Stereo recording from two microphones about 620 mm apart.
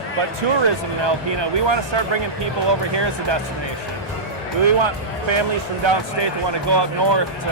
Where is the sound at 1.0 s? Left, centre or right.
Right.